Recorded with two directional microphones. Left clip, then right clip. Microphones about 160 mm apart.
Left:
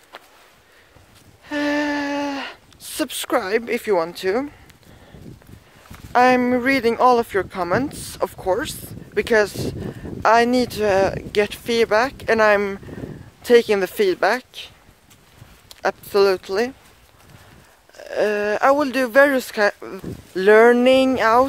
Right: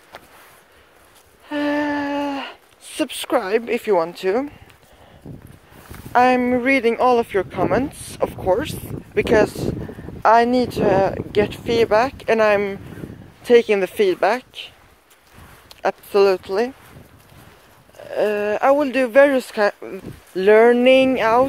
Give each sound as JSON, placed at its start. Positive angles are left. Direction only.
{"t": 1.5, "sound": "a sound", "side_deg": 15}
{"t": 6.1, "sound": "speech", "side_deg": 20}
{"t": 15.8, "sound": "speech", "side_deg": 15}
{"t": 17.9, "sound": "speech", "side_deg": 20}